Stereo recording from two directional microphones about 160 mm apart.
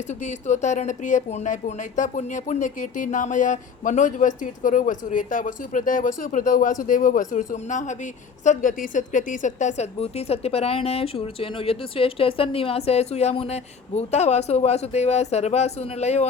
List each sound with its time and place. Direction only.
0.1 s a woman's voice: 50° left (ahead or behind)